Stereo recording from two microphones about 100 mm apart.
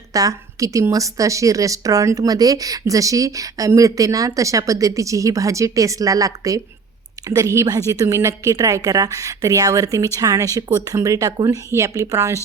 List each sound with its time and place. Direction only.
0.1 s a woman's voice: 35° right (ahead or behind)